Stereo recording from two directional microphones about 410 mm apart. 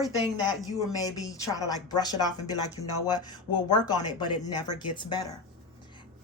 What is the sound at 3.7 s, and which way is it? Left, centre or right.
Speech, centre.